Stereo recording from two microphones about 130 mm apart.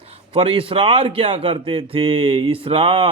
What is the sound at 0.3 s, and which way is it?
Speech, 45° right (ahead or behind).